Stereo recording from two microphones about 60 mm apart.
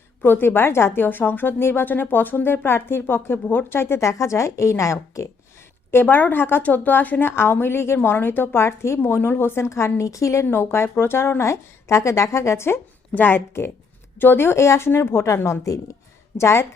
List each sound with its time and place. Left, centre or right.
0.3 s speech: left
4.1 s a woman's voice: left
5.9 s speech: left
8.6 s a woman's voice: left
10.4 s a woman's voice: left
13.1 s a woman's voice: left
15.4 s a woman's voice: left
16.4 s a woman's voice: left